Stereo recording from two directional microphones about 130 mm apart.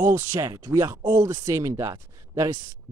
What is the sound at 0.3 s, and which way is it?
Speech, 25° right (ahead or behind).